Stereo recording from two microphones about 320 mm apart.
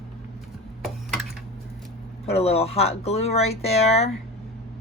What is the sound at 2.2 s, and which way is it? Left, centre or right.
Speech, centre.